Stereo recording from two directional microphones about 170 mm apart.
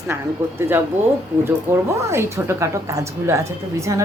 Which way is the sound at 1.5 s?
15° right (ahead or behind).